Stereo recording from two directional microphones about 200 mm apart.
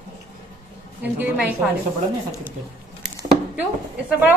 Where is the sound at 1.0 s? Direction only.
10° right (ahead or behind).